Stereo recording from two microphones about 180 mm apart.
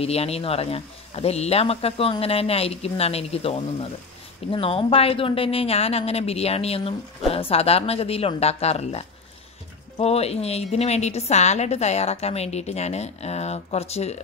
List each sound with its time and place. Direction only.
0.0 s speech: 35° left (ahead or behind)